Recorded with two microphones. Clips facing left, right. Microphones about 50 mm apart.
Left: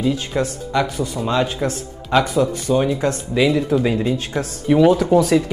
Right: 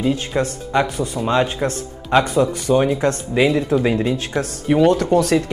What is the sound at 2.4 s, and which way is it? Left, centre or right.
Speech, right.